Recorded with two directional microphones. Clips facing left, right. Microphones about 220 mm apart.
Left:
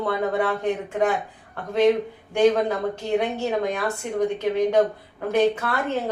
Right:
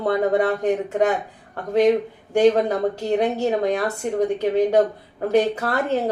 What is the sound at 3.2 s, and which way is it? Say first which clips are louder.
Speech: right 4 dB; 40° right (ahead or behind).